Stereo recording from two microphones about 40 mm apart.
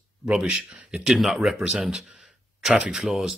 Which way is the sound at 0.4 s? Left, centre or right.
Centre.